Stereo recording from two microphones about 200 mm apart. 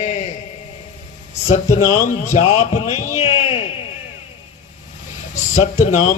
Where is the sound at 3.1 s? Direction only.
35° left (ahead or behind).